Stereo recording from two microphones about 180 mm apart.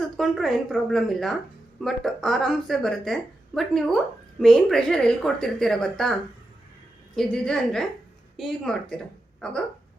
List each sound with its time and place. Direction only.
0.0 s a woman's voice: centre (ahead or behind)
7.2 s a woman's voice: 5° left (ahead or behind)